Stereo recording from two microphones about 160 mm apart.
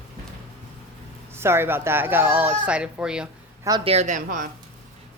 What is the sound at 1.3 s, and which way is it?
A woman's voice, 15° right (ahead or behind).